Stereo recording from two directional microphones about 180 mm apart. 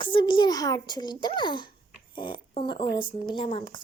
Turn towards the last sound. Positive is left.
turn(degrees=30)  # may be behind; listen again after turning